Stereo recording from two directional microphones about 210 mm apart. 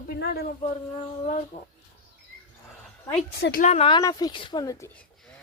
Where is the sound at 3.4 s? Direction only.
45° left (ahead or behind).